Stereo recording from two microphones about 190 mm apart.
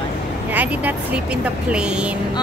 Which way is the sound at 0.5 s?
10° right (ahead or behind).